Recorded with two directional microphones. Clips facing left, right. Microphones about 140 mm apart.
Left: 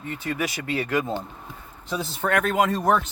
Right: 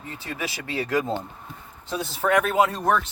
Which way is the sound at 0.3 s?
30° right (ahead or behind).